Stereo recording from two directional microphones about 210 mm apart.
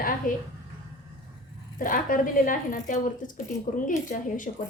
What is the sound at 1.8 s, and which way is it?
A woman's voice, 40° left (ahead or behind).